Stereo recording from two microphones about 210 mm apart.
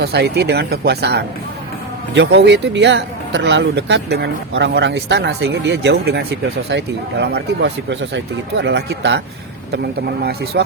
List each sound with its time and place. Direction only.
0.0 s speech: 50° right (ahead or behind)